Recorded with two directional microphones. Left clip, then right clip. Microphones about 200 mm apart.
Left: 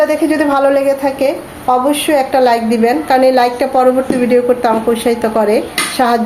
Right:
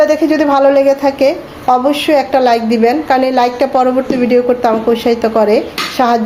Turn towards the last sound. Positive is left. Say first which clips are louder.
# even
turn(degrees=-15)  # may be behind; listen again after turning